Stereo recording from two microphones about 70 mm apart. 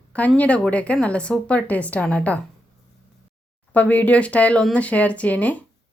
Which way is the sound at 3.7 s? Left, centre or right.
Left.